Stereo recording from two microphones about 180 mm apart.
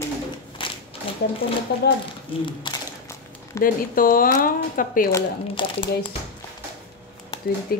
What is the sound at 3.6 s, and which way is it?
A woman's voice, 50° left (ahead or behind).